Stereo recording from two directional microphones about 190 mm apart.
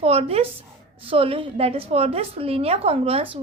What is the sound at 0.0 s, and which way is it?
A woman's voice, 30° right (ahead or behind).